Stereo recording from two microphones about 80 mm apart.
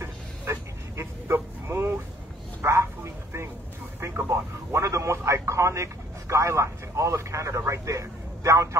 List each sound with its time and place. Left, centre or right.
0.0 s a sound: right
2.6 s bow-wow: right
4.0 s speech: right